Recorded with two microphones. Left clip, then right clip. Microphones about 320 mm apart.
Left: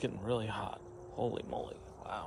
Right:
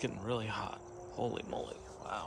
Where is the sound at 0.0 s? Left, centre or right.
Centre.